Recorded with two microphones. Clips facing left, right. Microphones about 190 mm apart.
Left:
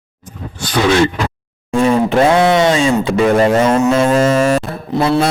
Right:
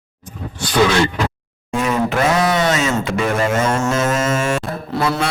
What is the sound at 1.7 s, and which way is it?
A man's voice, 30° left (ahead or behind).